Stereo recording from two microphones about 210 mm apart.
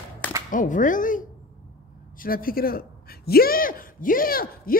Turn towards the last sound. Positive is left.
turn(degrees=45)  # may be behind; listen again after turning